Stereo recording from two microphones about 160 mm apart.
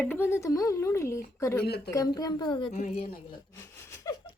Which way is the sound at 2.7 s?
50° left (ahead or behind).